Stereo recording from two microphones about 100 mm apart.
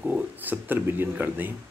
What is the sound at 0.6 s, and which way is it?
Speech, 20° right (ahead or behind).